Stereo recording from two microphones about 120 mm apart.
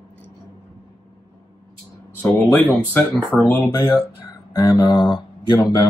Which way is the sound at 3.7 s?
35° left (ahead or behind).